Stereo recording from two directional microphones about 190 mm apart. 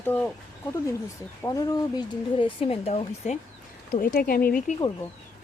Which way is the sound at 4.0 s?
50° left (ahead or behind).